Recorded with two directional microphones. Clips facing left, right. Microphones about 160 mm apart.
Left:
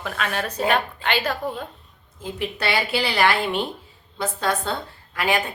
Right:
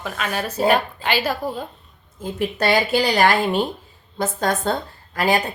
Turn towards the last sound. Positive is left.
turn(degrees=-40)  # may be behind; listen again after turning